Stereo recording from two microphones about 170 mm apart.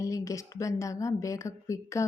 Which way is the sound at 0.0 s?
20° left (ahead or behind).